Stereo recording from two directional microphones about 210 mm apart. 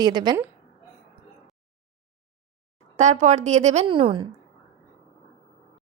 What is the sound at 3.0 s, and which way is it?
A woman's voice, 35° right (ahead or behind).